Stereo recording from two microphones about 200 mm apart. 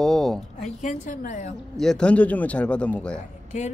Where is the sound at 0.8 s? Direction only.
40° left (ahead or behind).